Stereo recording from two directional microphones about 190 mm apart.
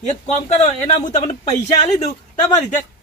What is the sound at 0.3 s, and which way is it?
A man's voice, 35° left (ahead or behind).